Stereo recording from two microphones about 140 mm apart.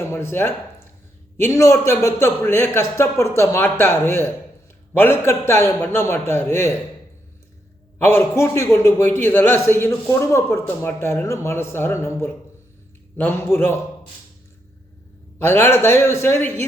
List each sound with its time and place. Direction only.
0.0 s a man's voice: 15° left (ahead or behind)
7.9 s a man's voice: 15° left (ahead or behind)
15.4 s a man's voice: 15° left (ahead or behind)